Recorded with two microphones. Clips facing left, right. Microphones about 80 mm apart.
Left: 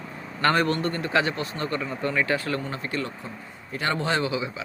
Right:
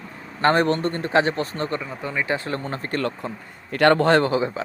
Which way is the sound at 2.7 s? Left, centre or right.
Right.